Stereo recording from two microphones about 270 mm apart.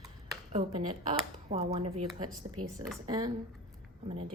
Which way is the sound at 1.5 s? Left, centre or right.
Right.